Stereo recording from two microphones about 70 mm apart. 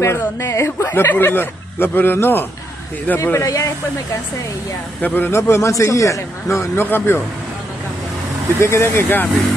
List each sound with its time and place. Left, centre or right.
0.0 s speech: left
0.8 s speech: left
3.3 s a man's voice: left
5.0 s a man's voice: left
6.8 s speech: left
8.5 s speech: left